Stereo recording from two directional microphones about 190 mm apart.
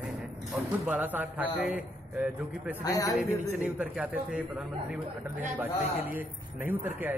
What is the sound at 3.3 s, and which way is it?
Speech, 5° right (ahead or behind).